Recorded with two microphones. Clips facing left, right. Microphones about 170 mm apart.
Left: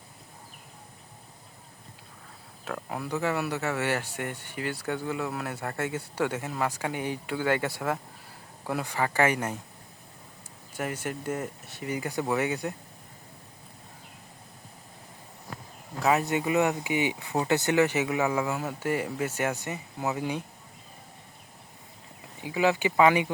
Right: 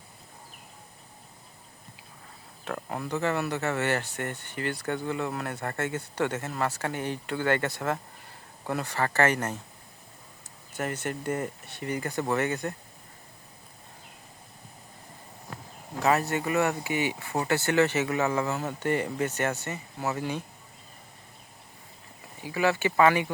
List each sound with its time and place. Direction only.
2.6 s speech: 5° left (ahead or behind)
10.8 s speech: 10° left (ahead or behind)
16.1 s speech: 15° left (ahead or behind)
22.4 s speech: 15° left (ahead or behind)